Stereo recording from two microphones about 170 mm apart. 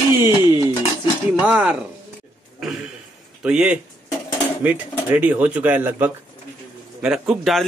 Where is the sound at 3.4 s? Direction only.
5° right (ahead or behind).